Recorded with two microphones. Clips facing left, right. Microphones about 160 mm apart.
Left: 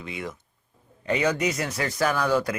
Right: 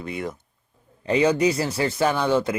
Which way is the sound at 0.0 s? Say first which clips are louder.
Right 4 dB; 45° right (ahead or behind).